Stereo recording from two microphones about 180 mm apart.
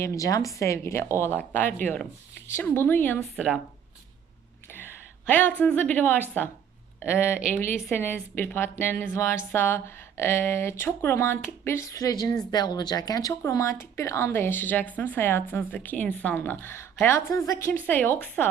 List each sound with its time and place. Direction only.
0.0 s speech: 15° left (ahead or behind)
5.3 s speech: 10° left (ahead or behind)
7.3 s a woman's voice: 5° right (ahead or behind)
7.9 s speech: 10° left (ahead or behind)